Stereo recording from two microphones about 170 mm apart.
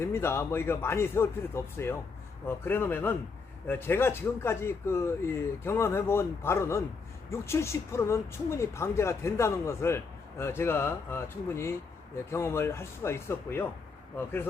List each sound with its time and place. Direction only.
0.0 s speech: 15° left (ahead or behind)